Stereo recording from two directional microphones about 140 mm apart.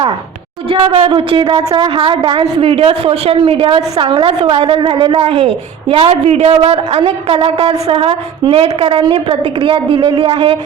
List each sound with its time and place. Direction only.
0.7 s a woman's voice: 40° right (ahead or behind)